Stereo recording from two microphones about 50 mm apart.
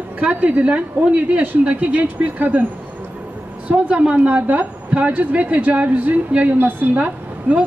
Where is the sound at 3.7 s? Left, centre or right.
Right.